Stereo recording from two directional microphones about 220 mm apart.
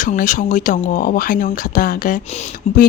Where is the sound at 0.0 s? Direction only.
35° left (ahead or behind).